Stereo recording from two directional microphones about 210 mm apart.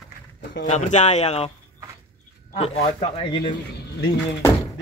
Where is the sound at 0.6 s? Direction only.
35° left (ahead or behind).